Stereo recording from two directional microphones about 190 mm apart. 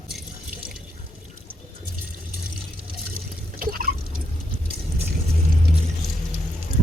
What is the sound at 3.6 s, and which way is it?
Liquid, 50° right (ahead or behind).